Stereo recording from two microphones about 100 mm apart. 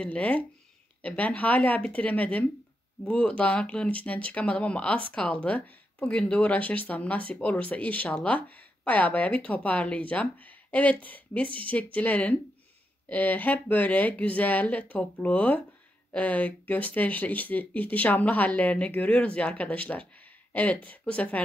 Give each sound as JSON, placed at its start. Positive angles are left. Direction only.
{"t": 0.0, "sound": "speech", "side_deg": 15}